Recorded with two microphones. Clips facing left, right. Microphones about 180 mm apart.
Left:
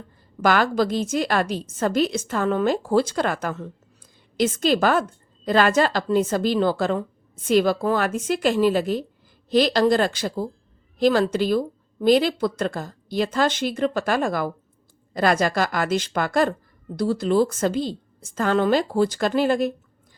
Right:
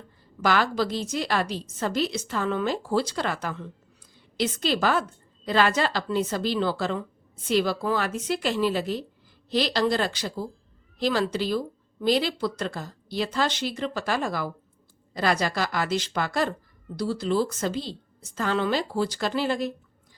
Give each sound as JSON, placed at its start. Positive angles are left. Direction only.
{"t": 0.4, "sound": "speech", "side_deg": 50}